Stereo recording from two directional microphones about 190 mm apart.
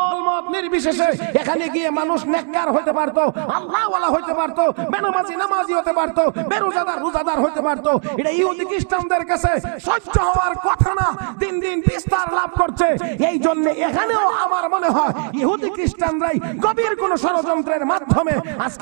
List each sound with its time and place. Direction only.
0.2 s a man's voice: 15° right (ahead or behind)